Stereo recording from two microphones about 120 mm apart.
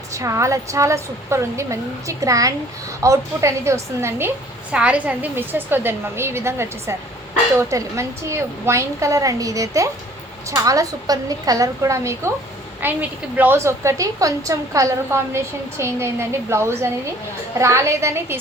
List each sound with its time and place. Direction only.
0.1 s a woman's voice: 25° right (ahead or behind)
4.7 s a woman's voice: 10° right (ahead or behind)